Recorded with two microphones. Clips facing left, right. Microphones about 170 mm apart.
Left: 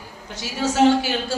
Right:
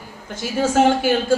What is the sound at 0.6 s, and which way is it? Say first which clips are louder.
Speech: right 1 dB; 50° right (ahead or behind).